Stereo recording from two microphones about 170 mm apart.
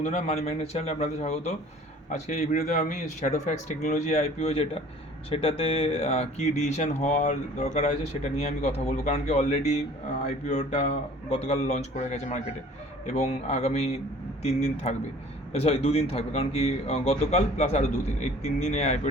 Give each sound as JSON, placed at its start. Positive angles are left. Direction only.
{"t": 0.0, "sound": "speech", "side_deg": 45}